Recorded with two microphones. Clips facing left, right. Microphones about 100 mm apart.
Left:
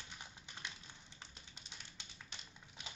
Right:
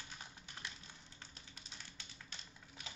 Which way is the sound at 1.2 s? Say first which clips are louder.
Even; 20° left (ahead or behind).